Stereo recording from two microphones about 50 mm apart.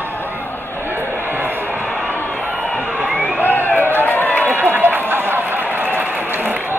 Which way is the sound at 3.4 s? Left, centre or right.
Left.